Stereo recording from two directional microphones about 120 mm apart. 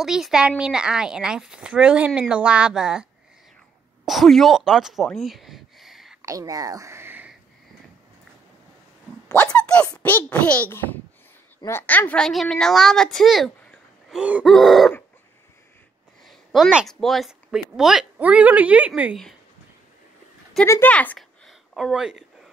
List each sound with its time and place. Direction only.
0.0 s speech: 5° right (ahead or behind)
6.2 s whispering: 30° right (ahead or behind)
9.3 s a sound: 10° left (ahead or behind)
9.9 s a child's voice: 10° left (ahead or behind)
12.3 s a woman's voice: 5° left (ahead or behind)
14.4 s a sound: centre (ahead or behind)
16.3 s a woman's voice: centre (ahead or behind)
20.6 s speech: 25° left (ahead or behind)
20.9 s a child's voice: 10° left (ahead or behind)
21.2 s a sound: centre (ahead or behind)